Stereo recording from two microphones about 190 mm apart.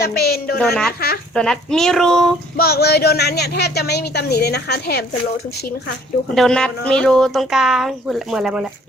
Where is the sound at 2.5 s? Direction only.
55° left (ahead or behind).